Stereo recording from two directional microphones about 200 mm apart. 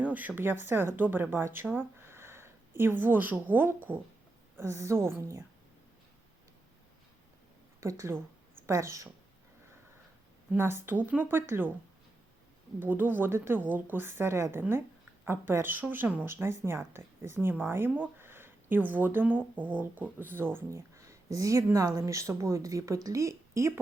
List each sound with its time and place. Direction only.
0.1 s a woman's voice: 10° right (ahead or behind)
7.8 s a woman's voice: 15° right (ahead or behind)
10.5 s a woman's voice: 10° right (ahead or behind)
12.8 s a woman's voice: 10° right (ahead or behind)